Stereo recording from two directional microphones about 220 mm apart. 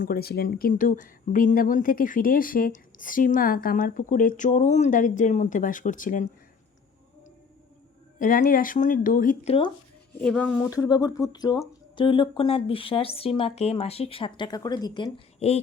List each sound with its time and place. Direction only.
0.0 s speech: 45° left (ahead or behind)
8.2 s speech: 40° left (ahead or behind)
10.2 s speech: 5° left (ahead or behind)
10.8 s speech: 15° left (ahead or behind)